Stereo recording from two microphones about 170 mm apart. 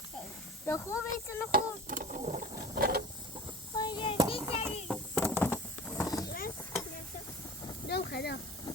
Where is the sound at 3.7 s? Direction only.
25° left (ahead or behind).